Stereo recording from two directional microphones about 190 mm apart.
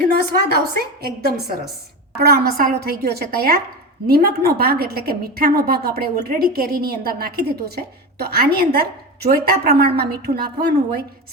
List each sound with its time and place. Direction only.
0.3 s a woman's voice: 55° right (ahead or behind)